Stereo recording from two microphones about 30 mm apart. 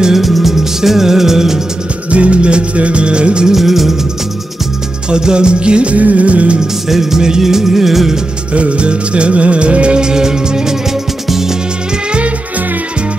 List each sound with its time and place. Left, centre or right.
0.1 s music: centre
2.0 s music: right
3.5 s music: centre
5.1 s music: right
5.9 s music of bollywood: right
6.9 s music: centre
8.5 s music: right
9.9 s music: right